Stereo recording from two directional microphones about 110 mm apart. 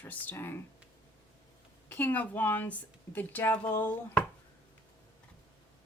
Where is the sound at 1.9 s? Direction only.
15° left (ahead or behind).